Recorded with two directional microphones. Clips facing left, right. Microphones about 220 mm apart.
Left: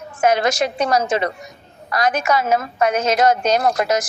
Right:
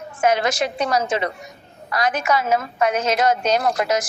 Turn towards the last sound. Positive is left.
turn(degrees=40)  # may be behind; listen again after turning